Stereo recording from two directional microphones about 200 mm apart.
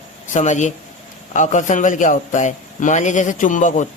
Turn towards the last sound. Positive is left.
turn(degrees=40)  # may be behind; listen again after turning